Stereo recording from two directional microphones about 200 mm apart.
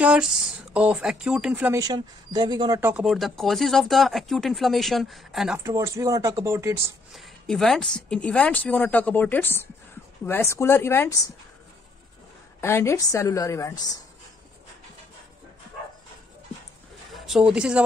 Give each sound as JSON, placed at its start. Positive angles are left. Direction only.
{"t": 0.0, "sound": "speech", "side_deg": -5}
{"t": 1.8, "sound": "speech", "side_deg": -20}
{"t": 2.8, "sound": "speech", "side_deg": -5}
{"t": 5.6, "sound": "speech", "side_deg": -15}
{"t": 7.1, "sound": "speech", "side_deg": 0}
{"t": 12.5, "sound": "speech", "side_deg": 10}
{"t": 17.1, "sound": "speech", "side_deg": 0}